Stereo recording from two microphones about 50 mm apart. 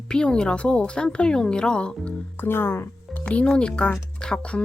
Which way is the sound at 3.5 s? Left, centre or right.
Centre.